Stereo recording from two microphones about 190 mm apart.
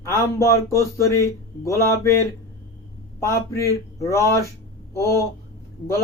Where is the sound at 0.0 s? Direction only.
15° left (ahead or behind).